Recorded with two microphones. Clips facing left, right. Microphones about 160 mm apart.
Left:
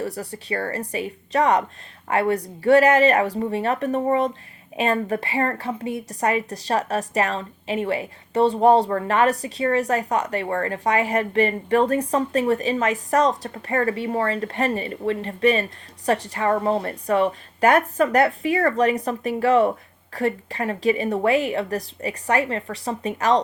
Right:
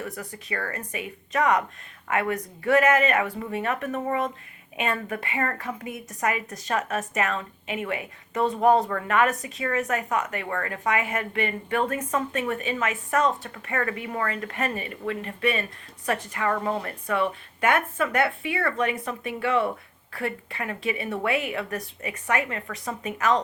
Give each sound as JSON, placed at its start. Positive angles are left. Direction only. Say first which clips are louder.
{"t": 0.0, "sound": "a woman's voice", "louder": "left 6 dB", "side_deg": 35}